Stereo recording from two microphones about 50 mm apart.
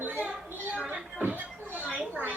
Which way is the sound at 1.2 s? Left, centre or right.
Right.